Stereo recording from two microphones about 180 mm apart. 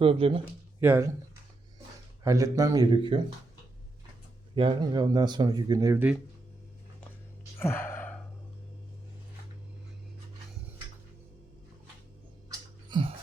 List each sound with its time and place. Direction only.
0.0 s speech: 30° right (ahead or behind)
0.8 s speech: 15° right (ahead or behind)
2.2 s speech: 15° right (ahead or behind)
4.5 s speech: 30° right (ahead or behind)
7.6 s gasp: 15° left (ahead or behind)
12.5 s a sound: 25° right (ahead or behind)